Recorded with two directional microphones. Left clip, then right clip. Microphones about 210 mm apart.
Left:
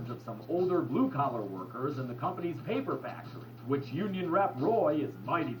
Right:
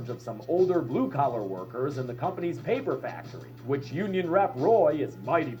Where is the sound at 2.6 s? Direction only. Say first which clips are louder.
Right 6 dB; 30° right (ahead or behind).